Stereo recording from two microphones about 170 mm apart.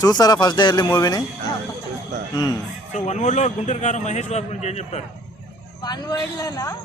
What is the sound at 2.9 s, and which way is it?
A man's voice, 45° left (ahead or behind).